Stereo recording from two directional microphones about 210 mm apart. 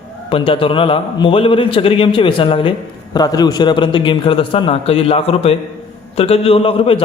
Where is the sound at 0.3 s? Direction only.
25° left (ahead or behind).